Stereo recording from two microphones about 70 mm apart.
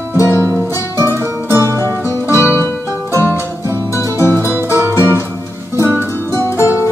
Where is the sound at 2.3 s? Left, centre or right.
Right.